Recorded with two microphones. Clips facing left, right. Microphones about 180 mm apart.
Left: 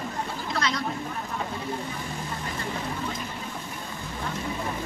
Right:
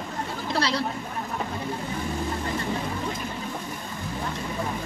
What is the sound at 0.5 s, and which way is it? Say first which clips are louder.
Speech: right 3 dB; 30° right (ahead or behind).